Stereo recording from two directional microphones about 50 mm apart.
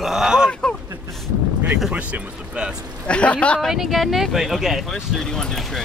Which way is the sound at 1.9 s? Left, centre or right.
Right.